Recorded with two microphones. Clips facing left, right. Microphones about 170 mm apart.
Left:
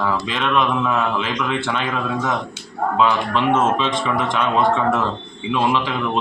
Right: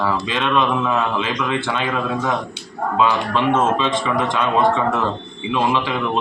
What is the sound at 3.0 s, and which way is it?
Speech, 15° right (ahead or behind).